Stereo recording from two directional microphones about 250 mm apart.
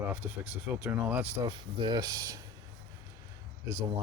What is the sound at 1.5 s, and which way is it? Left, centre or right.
Speech, centre.